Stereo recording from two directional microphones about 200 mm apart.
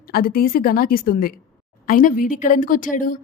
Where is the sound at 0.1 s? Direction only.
45° left (ahead or behind).